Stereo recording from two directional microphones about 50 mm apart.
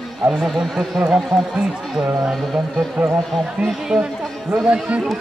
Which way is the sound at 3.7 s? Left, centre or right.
Centre.